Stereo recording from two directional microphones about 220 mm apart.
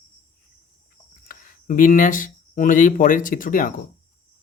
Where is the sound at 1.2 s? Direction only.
40° left (ahead or behind).